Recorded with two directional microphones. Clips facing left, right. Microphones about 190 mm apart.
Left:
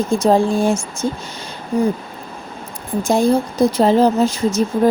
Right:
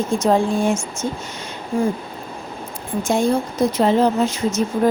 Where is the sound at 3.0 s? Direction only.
35° left (ahead or behind).